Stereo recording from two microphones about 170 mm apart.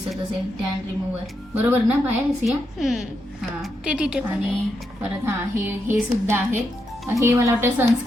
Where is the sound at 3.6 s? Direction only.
5° right (ahead or behind).